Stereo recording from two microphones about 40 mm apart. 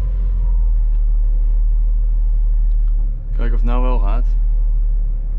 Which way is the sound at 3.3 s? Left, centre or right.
Centre.